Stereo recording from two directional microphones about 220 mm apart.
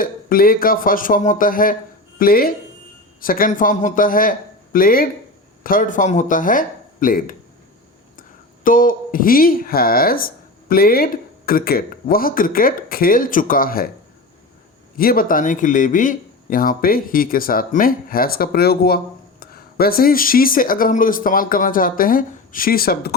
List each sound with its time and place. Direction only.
0.0 s a man's voice: 40° left (ahead or behind)
8.6 s speech: 40° left (ahead or behind)
14.9 s speech: 40° left (ahead or behind)